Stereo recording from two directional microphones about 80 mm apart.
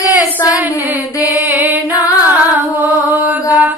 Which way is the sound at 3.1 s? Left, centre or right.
Right.